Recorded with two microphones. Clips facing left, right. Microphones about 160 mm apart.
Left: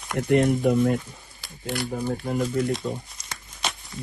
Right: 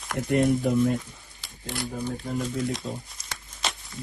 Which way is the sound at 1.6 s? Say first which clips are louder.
Left 4 dB; 70° left (ahead or behind).